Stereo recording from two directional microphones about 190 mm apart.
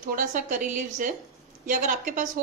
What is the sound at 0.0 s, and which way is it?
A woman's voice, 45° right (ahead or behind).